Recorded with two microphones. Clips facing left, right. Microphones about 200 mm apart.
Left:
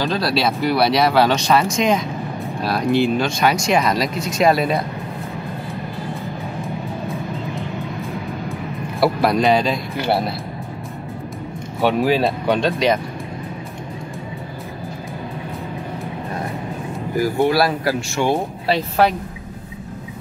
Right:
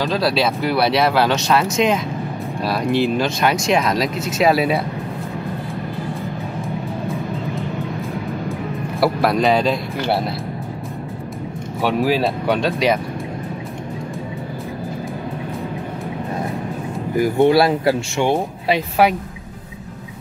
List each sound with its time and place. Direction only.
0.0 s speech: centre (ahead or behind)
9.0 s speech: centre (ahead or behind)
11.8 s speech: centre (ahead or behind)
17.2 s speech: 20° right (ahead or behind)
18.7 s speech: 10° right (ahead or behind)